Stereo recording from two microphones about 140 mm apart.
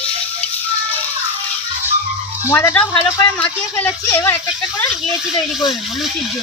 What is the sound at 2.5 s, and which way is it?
Speech, 15° left (ahead or behind).